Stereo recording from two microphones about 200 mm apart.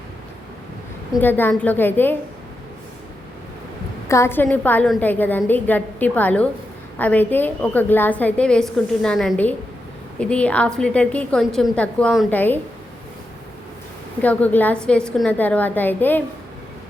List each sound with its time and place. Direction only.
1.2 s a woman's voice: 10° left (ahead or behind)
4.1 s a woman's voice: 10° left (ahead or behind)
14.2 s a woman's voice: 10° left (ahead or behind)